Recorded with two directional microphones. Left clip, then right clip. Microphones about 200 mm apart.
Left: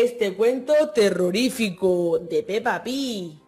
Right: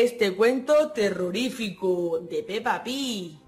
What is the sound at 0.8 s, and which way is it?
A woman's voice, 25° left (ahead or behind).